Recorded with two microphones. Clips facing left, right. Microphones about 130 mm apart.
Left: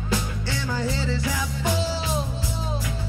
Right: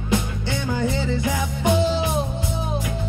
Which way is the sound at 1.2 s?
20° right (ahead or behind).